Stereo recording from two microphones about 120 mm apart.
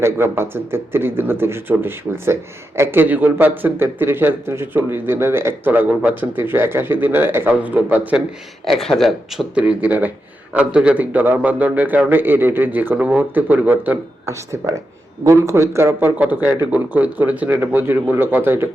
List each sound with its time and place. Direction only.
0.0 s speech: 20° right (ahead or behind)
8.6 s speech: centre (ahead or behind); by 18.7 s 15° right (ahead or behind)